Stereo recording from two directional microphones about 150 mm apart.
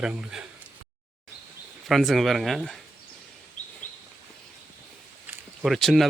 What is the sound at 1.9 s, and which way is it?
Speech, centre (ahead or behind).